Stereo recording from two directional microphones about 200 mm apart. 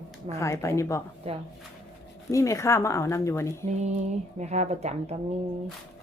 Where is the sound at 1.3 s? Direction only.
30° right (ahead or behind).